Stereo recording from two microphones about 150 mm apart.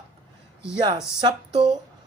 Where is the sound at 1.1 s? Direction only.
30° right (ahead or behind).